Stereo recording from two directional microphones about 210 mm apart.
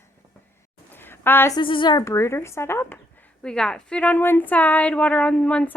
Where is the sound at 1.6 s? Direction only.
25° left (ahead or behind); by 5.8 s 5° left (ahead or behind).